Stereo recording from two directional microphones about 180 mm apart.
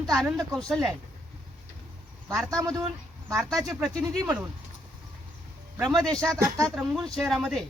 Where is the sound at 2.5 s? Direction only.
20° right (ahead or behind).